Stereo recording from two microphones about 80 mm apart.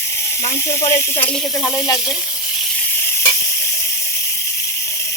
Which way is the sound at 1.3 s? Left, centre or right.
Centre.